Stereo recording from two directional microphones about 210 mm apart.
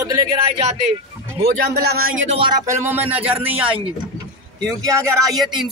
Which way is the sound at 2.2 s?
25° right (ahead or behind).